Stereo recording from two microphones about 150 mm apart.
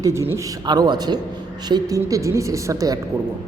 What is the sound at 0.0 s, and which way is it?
A woman's voice, 20° right (ahead or behind).